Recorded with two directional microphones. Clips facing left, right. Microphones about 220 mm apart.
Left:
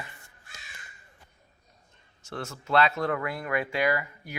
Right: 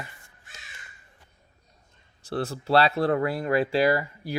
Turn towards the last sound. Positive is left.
turn(degrees=-35)  # may be behind; listen again after turning